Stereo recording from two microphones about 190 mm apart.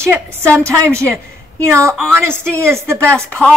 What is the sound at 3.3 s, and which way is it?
Speech, 5° left (ahead or behind).